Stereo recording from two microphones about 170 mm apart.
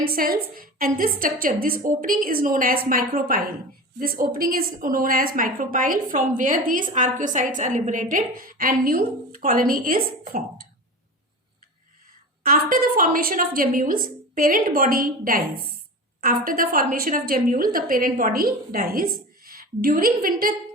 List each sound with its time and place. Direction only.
0.0 s a woman's voice: 60° right (ahead or behind)
12.4 s a woman's voice: 55° right (ahead or behind)